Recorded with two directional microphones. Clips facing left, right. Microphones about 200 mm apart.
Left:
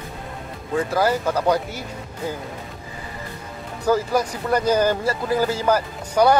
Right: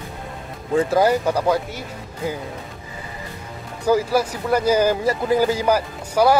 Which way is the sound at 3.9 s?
10° right (ahead or behind).